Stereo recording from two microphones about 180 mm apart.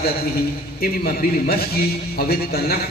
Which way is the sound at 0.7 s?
55° left (ahead or behind).